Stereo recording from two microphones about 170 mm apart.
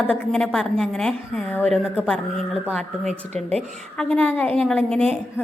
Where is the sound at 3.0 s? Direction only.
40° right (ahead or behind).